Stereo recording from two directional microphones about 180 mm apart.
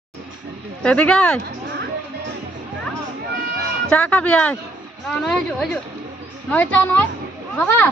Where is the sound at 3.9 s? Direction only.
5° left (ahead or behind).